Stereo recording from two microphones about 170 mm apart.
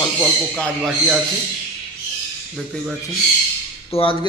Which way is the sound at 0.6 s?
5° right (ahead or behind).